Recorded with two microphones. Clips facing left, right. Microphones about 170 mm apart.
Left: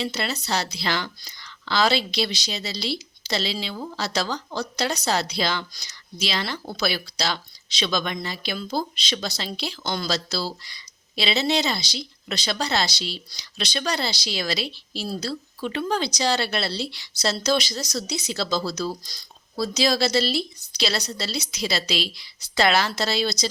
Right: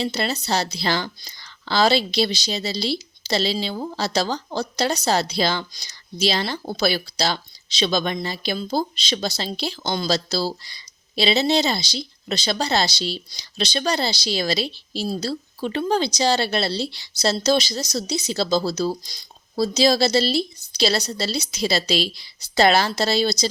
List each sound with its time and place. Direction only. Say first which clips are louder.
0.0 s a woman's voice: right 3 dB; 30° right (ahead or behind)